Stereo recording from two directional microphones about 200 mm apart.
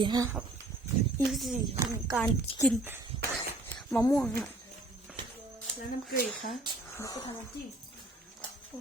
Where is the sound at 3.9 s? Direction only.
10° left (ahead or behind).